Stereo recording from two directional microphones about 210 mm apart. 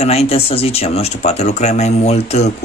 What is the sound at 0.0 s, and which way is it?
Speech, 30° left (ahead or behind).